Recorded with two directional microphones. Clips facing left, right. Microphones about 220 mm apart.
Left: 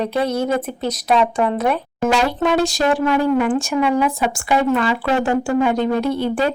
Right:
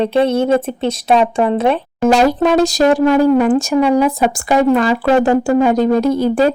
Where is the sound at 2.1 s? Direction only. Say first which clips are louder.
Right 6 dB; 40° right (ahead or behind).